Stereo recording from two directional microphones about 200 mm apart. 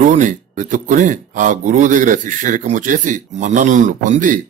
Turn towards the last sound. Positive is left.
turn(degrees=-40)  # may be behind; listen again after turning